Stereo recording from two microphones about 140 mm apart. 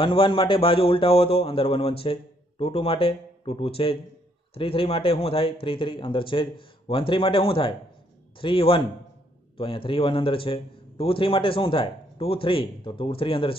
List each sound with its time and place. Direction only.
0.0 s a man's voice: 40° left (ahead or behind)